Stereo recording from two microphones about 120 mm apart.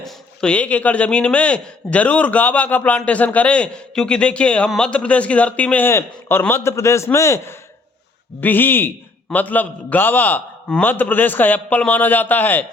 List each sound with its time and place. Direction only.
0.0 s a man's voice: 10° left (ahead or behind)